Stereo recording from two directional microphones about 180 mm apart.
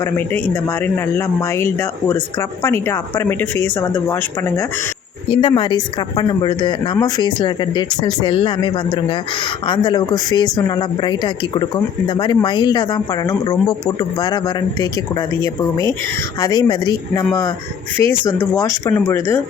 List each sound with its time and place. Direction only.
0.0 s speech: 10° left (ahead or behind)
5.3 s speech: 30° left (ahead or behind)